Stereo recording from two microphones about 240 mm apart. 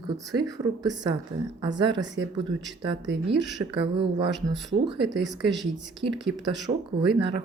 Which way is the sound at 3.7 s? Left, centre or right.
Right.